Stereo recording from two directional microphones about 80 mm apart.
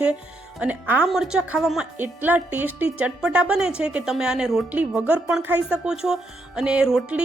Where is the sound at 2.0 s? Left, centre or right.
Right; by 4.6 s centre.